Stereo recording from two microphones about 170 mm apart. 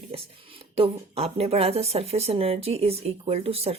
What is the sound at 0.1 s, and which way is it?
Speech, 35° right (ahead or behind).